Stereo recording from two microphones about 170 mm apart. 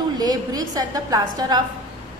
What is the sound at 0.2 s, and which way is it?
A woman's voice, 20° right (ahead or behind).